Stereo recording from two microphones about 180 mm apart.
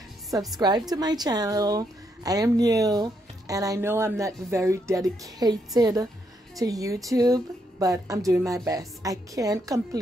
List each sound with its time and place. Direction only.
0.6 s a woman's voice: 25° right (ahead or behind)